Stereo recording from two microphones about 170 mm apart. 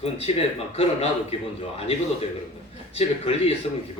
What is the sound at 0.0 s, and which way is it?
Speech, 35° left (ahead or behind).